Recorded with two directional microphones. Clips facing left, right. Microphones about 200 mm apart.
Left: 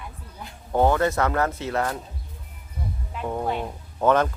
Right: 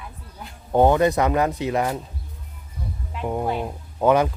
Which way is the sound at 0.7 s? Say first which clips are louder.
Right 4 dB; 20° right (ahead or behind).